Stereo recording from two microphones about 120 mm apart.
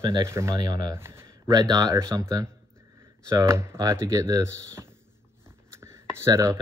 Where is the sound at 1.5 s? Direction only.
35° right (ahead or behind).